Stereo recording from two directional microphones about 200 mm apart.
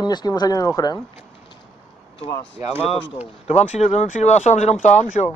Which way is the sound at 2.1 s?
25° left (ahead or behind).